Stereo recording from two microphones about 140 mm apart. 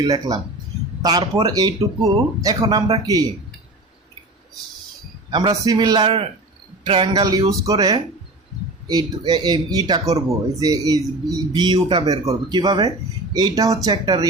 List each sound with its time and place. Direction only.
0.0 s speech: 25° right (ahead or behind)
5.3 s speech: 25° right (ahead or behind)
7.1 s speech: 25° right (ahead or behind)